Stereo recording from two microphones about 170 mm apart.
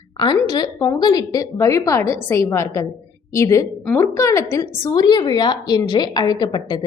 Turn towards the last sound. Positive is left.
turn(degrees=25)  # may be behind; listen again after turning